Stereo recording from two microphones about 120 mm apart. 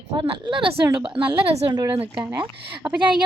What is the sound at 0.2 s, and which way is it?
Speech, 45° right (ahead or behind).